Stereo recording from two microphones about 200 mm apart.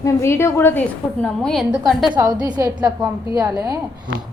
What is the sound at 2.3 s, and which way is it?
Speech, 20° right (ahead or behind).